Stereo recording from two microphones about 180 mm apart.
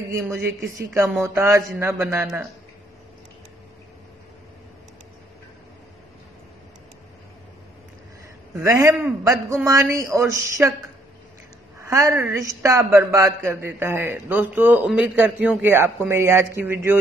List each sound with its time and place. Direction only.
0.1 s a woman's voice: 15° right (ahead or behind)
8.5 s a woman's voice: 15° right (ahead or behind)
11.8 s a woman's voice: 15° right (ahead or behind)